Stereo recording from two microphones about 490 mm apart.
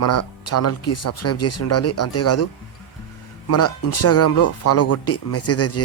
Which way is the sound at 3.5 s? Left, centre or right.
Left.